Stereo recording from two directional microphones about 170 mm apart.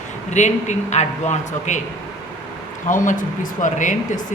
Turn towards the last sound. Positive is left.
turn(degrees=45)  # may be behind; listen again after turning